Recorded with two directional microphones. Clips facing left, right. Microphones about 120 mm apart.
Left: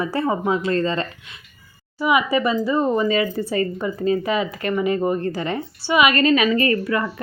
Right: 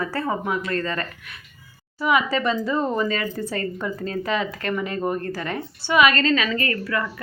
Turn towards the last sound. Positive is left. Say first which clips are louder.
# left 5 dB
turn(degrees=20)  # may be behind; listen again after turning